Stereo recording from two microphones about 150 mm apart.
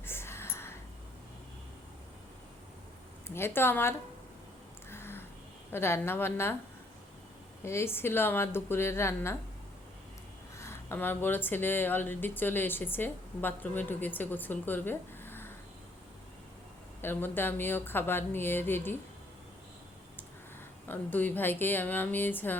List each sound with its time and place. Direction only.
0.0 s whispering: 15° left (ahead or behind)
3.2 s speech: 15° left (ahead or behind)
4.9 s a sound: 15° left (ahead or behind)
5.7 s speech: 15° left (ahead or behind)
7.6 s speech: 15° left (ahead or behind)
10.6 s speech: 15° left (ahead or behind)
17.0 s speech: 15° left (ahead or behind)
20.8 s speech: 10° left (ahead or behind)